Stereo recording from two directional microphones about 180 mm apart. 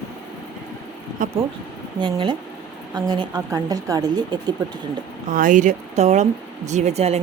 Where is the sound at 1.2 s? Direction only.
45° right (ahead or behind).